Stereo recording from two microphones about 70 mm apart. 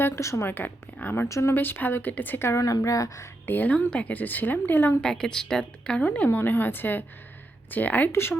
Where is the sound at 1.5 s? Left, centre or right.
Left.